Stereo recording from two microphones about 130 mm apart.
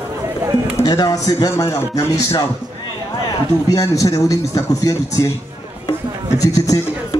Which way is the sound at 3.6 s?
25° left (ahead or behind).